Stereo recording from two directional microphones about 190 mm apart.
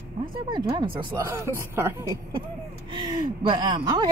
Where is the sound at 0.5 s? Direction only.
25° right (ahead or behind).